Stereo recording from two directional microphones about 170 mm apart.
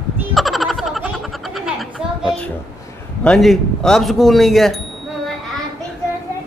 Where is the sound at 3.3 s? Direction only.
Centre (ahead or behind).